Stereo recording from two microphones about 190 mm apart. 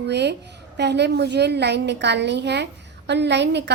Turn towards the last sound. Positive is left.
turn(degrees=-65)  # may be behind; listen again after turning